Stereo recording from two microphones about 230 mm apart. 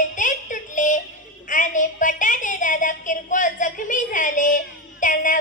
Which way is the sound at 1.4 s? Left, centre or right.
Left.